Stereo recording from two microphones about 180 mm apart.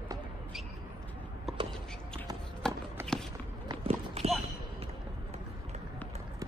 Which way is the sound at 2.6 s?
5° left (ahead or behind).